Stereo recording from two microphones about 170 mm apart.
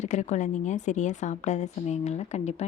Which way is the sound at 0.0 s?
45° left (ahead or behind).